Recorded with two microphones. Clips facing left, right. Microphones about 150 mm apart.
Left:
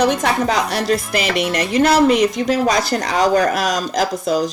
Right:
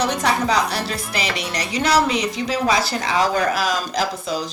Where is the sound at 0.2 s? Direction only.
50° left (ahead or behind).